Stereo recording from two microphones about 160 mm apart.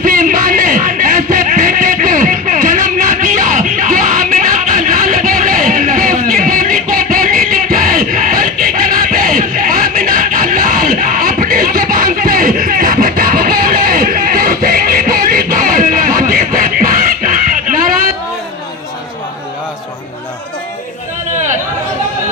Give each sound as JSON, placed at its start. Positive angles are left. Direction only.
{"t": 0.0, "sound": "music", "side_deg": -60}